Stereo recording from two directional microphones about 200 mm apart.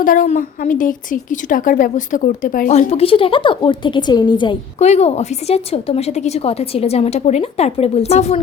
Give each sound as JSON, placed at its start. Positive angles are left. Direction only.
{"t": 0.0, "sound": "a woman's voice", "side_deg": 40}